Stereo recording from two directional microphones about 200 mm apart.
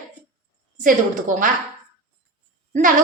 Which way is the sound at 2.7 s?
40° right (ahead or behind).